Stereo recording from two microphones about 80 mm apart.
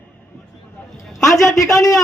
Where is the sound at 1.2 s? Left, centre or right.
Centre.